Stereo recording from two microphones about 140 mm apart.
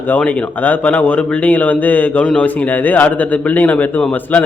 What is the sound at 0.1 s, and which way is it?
A man's voice, 10° left (ahead or behind).